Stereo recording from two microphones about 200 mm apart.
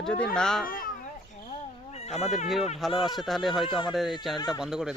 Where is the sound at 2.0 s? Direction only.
35° left (ahead or behind).